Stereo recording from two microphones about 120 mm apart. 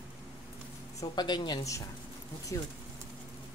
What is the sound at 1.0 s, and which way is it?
Speech, 35° left (ahead or behind).